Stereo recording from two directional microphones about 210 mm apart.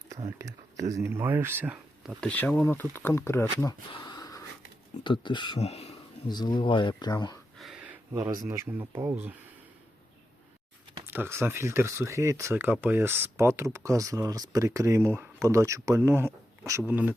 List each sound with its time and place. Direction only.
0.3 s speech: 15° right (ahead or behind)
2.2 s speech: 10° left (ahead or behind)
7.6 s a sound: 5° right (ahead or behind)
8.1 s speech: 10° right (ahead or behind)
11.1 s speech: 10° right (ahead or behind)